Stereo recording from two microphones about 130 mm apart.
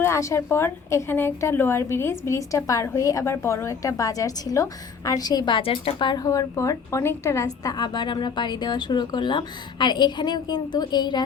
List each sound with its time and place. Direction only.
0.0 s a woman's voice: 25° left (ahead or behind)